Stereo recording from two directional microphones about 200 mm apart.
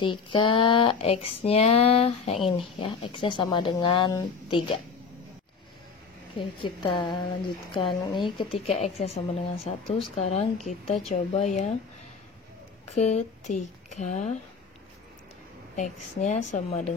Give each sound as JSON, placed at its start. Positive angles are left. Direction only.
{"t": 0.0, "sound": "speech", "side_deg": 25}
{"t": 6.3, "sound": "a woman's voice", "side_deg": 25}
{"t": 12.9, "sound": "a woman's voice", "side_deg": 35}
{"t": 15.7, "sound": "a woman's voice", "side_deg": 35}